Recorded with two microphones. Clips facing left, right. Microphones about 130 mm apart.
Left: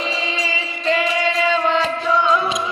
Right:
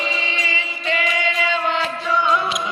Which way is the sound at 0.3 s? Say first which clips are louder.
Left 2 dB; 35° left (ahead or behind).